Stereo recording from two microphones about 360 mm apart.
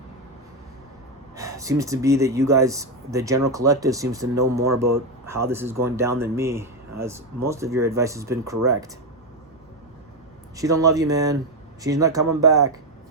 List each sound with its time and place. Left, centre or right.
1.4 s speech: centre
10.6 s speech: centre